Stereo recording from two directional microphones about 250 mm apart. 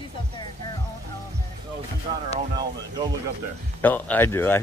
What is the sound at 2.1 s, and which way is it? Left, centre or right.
Speech, right.